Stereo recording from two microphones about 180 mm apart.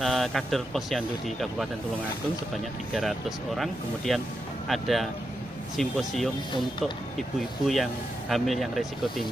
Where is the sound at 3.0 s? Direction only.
Centre (ahead or behind).